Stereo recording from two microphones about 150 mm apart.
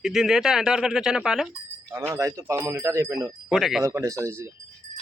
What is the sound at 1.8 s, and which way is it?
Speech, 20° right (ahead or behind).